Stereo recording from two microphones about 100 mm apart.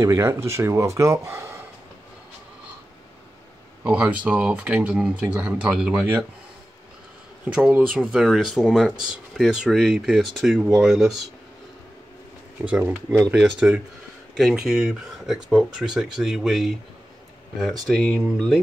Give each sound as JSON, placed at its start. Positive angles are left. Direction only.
{"t": 0.0, "sound": "speech", "side_deg": -30}
{"t": 3.8, "sound": "speech", "side_deg": -10}
{"t": 7.4, "sound": "speech", "side_deg": -15}
{"t": 12.6, "sound": "speech", "side_deg": -15}
{"t": 17.8, "sound": "speech", "side_deg": 5}